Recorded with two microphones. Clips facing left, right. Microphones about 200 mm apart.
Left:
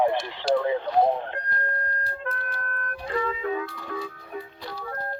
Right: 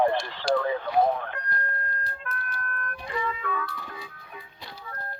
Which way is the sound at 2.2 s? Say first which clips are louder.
Left 3 dB; 25° left (ahead or behind).